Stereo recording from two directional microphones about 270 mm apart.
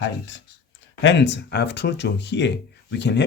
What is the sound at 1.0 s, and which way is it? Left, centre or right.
Speech, left.